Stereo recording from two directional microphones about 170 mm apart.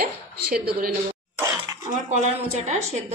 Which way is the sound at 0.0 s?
60° right (ahead or behind).